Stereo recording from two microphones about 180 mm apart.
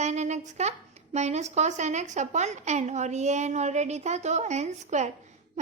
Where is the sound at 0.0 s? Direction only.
40° right (ahead or behind).